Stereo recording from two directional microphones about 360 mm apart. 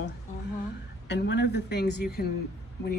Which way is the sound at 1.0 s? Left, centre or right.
Left.